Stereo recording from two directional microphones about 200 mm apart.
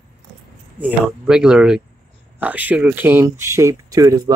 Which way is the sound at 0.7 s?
5° right (ahead or behind).